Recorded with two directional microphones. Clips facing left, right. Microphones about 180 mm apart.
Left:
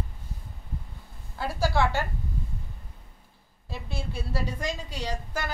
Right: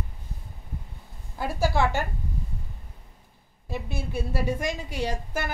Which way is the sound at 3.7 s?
15° right (ahead or behind).